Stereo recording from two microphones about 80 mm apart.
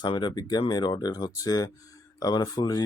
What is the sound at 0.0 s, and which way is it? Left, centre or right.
Speech, left.